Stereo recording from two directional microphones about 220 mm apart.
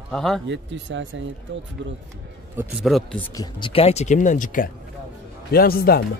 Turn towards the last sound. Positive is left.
turn(degrees=45)  # may be behind; listen again after turning